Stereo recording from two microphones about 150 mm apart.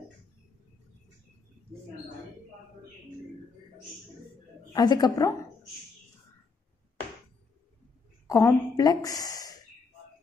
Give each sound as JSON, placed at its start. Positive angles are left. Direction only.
{"t": 4.7, "sound": "a woman's voice", "side_deg": 30}
{"t": 8.3, "sound": "a woman's voice", "side_deg": 20}